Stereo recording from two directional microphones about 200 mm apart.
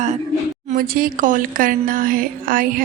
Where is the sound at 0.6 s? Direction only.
45° right (ahead or behind).